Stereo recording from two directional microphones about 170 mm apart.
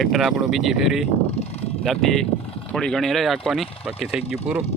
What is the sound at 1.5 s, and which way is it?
Vehicle, 35° left (ahead or behind).